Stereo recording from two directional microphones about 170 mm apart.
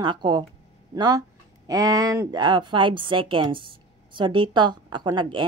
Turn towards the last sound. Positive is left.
turn(degrees=-30)  # may be behind; listen again after turning